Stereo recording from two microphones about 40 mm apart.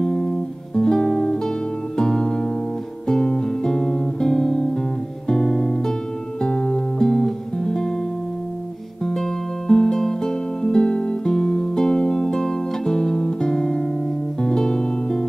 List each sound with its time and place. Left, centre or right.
0.0 s music: centre
3.1 s guitar: centre
5.3 s music: centre
9.0 s music: centre